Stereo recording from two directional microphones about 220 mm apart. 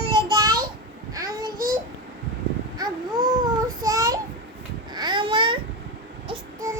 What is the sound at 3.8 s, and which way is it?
Child singing, 15° right (ahead or behind).